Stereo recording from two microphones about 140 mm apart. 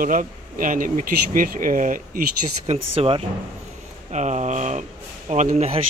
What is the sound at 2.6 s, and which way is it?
Speech, 45° right (ahead or behind).